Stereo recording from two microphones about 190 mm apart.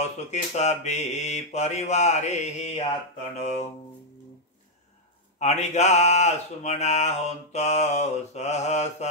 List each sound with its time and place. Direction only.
0.0 s speech: 35° left (ahead or behind)
5.4 s speech: 35° left (ahead or behind)